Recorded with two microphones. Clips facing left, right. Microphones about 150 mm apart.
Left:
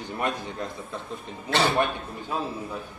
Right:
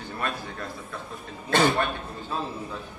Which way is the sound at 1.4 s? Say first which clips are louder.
Right 2 dB; 50° right (ahead or behind).